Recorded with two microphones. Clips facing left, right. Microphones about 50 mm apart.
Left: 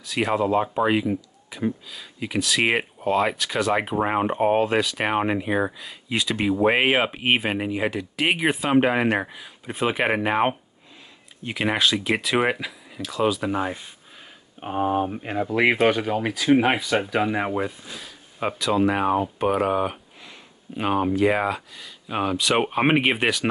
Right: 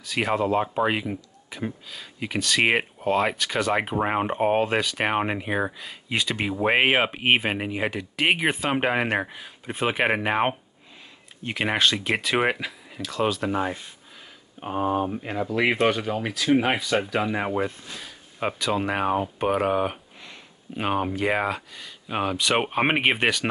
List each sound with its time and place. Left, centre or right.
0.0 s speech: centre
14.6 s speech: centre